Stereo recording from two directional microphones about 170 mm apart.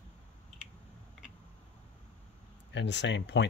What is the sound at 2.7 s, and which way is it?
Speech, 90° left.